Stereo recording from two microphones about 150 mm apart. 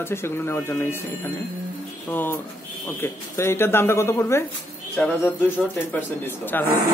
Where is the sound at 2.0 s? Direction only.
15° left (ahead or behind).